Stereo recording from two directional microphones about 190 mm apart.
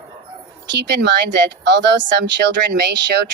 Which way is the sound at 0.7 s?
60° right (ahead or behind).